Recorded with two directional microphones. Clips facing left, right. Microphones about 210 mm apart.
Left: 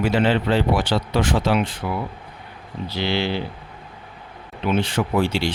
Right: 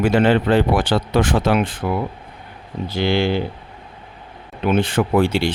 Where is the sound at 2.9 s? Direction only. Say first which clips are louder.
Right 5 dB; 50° right (ahead or behind).